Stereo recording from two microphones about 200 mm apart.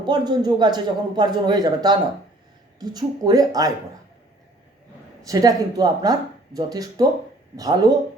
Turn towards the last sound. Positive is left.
turn(degrees=-20)  # may be behind; listen again after turning